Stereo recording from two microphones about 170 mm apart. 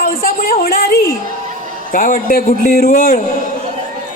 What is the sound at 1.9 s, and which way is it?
A man's voice, 55° left (ahead or behind).